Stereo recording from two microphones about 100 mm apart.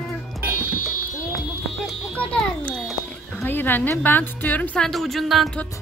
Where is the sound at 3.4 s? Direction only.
20° left (ahead or behind).